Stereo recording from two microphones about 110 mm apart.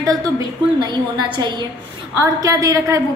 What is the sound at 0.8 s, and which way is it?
A woman's voice, 40° right (ahead or behind).